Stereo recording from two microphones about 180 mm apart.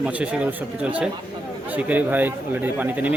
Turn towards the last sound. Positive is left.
turn(degrees=-10)  # may be behind; listen again after turning